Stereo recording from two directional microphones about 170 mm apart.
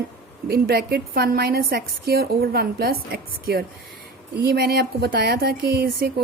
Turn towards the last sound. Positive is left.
turn(degrees=-65)  # may be behind; listen again after turning